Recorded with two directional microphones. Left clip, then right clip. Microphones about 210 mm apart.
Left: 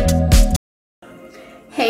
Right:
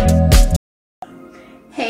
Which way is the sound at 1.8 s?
Centre (ahead or behind).